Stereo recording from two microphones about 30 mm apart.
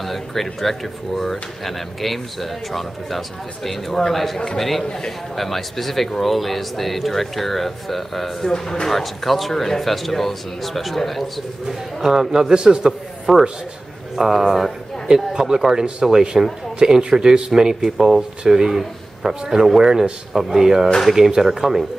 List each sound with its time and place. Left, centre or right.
0.0 s a man's voice: centre
11.6 s speech: centre
12.5 s a man's voice: right
13.3 s a man's voice: centre